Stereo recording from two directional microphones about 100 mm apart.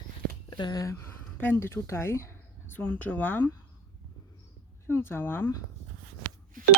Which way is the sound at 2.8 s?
15° left (ahead or behind).